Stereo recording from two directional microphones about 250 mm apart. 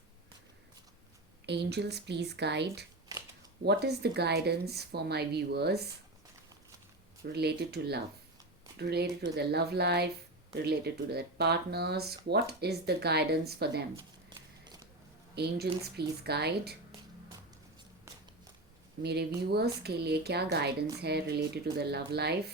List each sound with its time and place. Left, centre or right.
1.5 s speech: right
7.3 s speech: right
15.4 s speech: right
19.0 s speech: right